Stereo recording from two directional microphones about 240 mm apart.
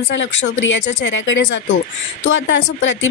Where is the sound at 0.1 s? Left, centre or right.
Left.